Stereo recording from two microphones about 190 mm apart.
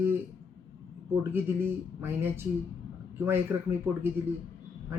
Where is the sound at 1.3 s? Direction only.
10° right (ahead or behind).